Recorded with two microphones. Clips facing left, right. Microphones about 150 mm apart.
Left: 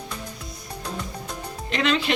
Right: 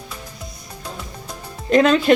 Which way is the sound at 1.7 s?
45° right (ahead or behind).